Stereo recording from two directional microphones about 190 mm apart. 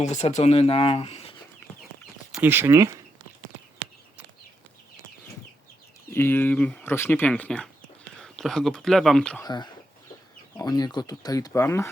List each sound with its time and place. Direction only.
0.0 s speech: 40° left (ahead or behind)
2.3 s speech: 10° right (ahead or behind)
6.1 s speech: 10° left (ahead or behind)
9.4 s speech: 20° left (ahead or behind)